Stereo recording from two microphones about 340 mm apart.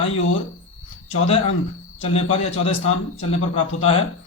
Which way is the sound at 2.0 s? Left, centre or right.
Centre.